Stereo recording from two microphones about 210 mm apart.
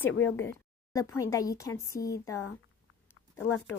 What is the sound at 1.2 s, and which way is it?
A woman's voice, 15° left (ahead or behind).